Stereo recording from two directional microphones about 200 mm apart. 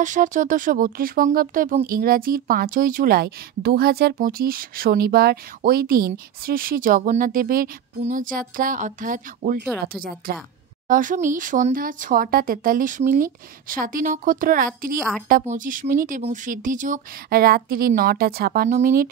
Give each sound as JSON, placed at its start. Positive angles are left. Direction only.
{"t": 0.0, "sound": "speech", "side_deg": -40}
{"t": 15.0, "sound": "a woman's voice", "side_deg": 0}
{"t": 15.2, "sound": "speech", "side_deg": -40}